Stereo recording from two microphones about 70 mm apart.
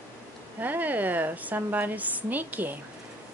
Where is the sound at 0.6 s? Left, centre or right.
Right.